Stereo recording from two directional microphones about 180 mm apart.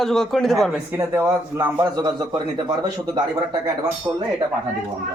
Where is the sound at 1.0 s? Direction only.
15° right (ahead or behind).